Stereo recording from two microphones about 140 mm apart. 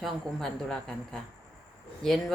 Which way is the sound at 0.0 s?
5° left (ahead or behind).